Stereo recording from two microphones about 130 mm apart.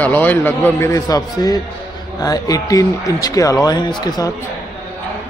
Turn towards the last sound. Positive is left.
turn(degrees=30)  # may be behind; listen again after turning